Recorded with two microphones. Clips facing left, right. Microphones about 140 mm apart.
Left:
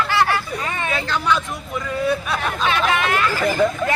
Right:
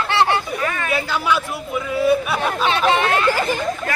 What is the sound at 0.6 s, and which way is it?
Speech, 25° left (ahead or behind).